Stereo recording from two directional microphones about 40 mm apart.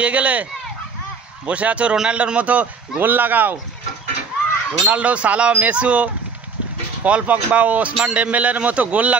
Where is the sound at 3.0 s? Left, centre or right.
Right.